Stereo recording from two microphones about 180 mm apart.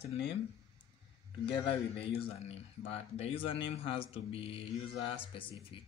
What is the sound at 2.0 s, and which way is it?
A man's voice, 35° left (ahead or behind).